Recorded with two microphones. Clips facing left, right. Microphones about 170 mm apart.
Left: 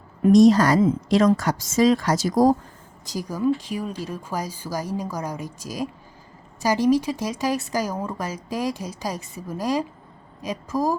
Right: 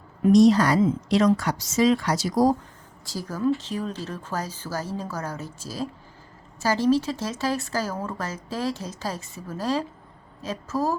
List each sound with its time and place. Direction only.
0.2 s a woman's voice: 45° left (ahead or behind)
3.1 s speech: 15° left (ahead or behind)